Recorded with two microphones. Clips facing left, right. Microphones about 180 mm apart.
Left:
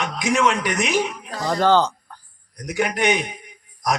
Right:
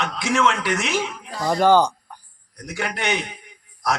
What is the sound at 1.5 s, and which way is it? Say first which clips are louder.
Speech: right 1 dB; 10° right (ahead or behind).